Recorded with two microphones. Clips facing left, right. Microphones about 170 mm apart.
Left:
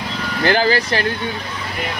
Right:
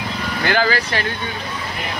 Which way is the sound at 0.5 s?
40° left (ahead or behind).